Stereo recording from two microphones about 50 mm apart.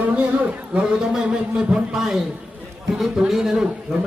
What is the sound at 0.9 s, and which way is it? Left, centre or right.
A man's voice, centre.